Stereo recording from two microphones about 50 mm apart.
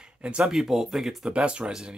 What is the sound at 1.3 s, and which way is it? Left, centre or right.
Speech, centre.